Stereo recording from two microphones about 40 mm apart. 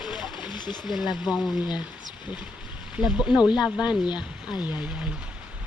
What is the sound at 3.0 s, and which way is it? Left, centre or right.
Speech, right.